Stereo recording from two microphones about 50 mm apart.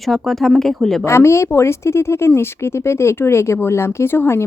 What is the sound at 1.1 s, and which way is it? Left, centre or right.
Speech, left.